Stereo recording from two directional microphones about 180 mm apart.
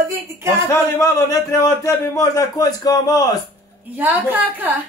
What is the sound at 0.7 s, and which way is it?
A man's voice, 15° left (ahead or behind).